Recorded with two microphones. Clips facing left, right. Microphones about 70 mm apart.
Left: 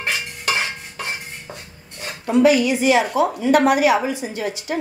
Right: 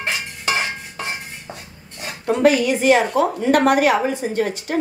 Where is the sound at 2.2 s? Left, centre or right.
Right.